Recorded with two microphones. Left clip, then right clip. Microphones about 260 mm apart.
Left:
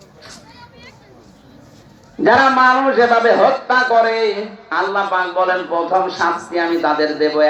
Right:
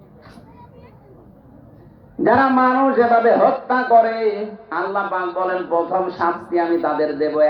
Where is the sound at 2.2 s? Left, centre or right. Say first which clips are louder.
Left 4 dB; left.